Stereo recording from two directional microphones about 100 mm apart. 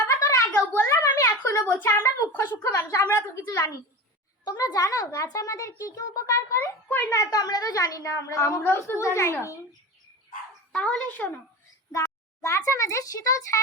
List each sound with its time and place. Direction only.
0.0 s a sound: 25° left (ahead or behind)
1.7 s a woman's voice: 20° left (ahead or behind)
4.4 s a woman's voice: 40° left (ahead or behind)
6.8 s a woman's voice: 20° left (ahead or behind)
10.7 s speech: 10° left (ahead or behind)
12.4 s a woman's voice: 30° left (ahead or behind)